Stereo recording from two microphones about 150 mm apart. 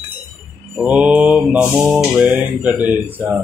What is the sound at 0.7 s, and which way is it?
Mantra, 5° right (ahead or behind).